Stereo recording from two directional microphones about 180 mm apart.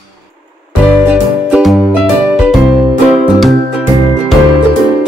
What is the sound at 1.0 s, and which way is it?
Music, 5° right (ahead or behind).